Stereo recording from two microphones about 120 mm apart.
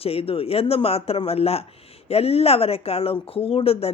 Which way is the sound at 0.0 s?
55° left (ahead or behind).